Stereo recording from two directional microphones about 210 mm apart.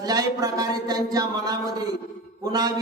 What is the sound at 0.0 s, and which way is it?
A man's voice, 15° right (ahead or behind).